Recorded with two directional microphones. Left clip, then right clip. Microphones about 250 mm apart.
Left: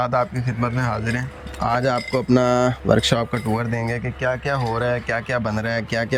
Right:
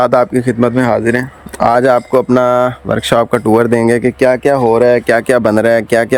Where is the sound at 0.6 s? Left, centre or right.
Right.